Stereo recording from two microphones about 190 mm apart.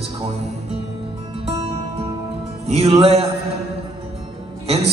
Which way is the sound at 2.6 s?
30° right (ahead or behind).